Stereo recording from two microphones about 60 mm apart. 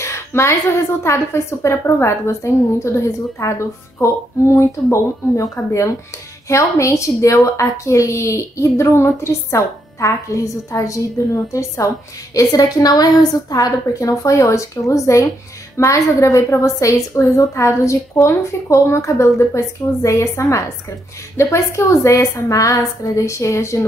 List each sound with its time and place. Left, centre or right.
0.0 s a sound: left
1.0 s a woman's voice: left
12.4 s a woman's voice: left